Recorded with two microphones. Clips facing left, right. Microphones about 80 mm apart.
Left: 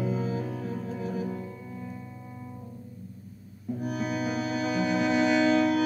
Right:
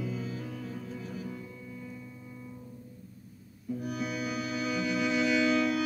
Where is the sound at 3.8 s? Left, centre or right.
Left.